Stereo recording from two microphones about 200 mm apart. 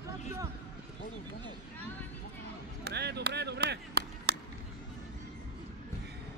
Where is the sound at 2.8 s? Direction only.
55° right (ahead or behind).